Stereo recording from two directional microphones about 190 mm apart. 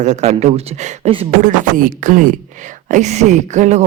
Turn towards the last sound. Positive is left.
turn(degrees=-40)  # may be behind; listen again after turning